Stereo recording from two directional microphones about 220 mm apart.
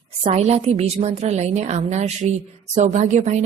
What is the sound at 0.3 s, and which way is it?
A woman's voice, 30° right (ahead or behind).